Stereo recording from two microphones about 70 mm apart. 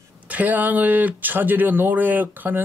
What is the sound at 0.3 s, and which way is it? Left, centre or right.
Speech, right.